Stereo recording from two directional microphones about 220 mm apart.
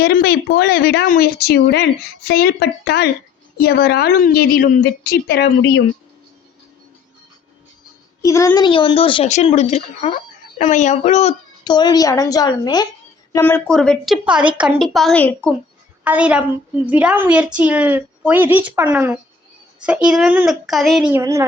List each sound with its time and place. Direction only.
0.0 s speech: 45° left (ahead or behind)
8.2 s a woman's voice: 15° left (ahead or behind)
13.3 s a woman's voice: 10° left (ahead or behind)
16.0 s a woman's voice: 5° right (ahead or behind)
21.1 s a woman's voice: 15° right (ahead or behind)